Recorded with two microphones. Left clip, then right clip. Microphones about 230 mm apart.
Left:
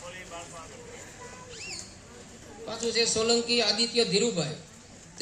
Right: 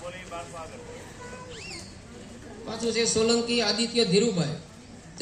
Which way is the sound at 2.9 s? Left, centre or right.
Right.